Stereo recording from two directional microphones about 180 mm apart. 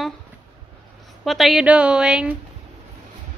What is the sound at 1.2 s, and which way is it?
A woman's voice, centre (ahead or behind).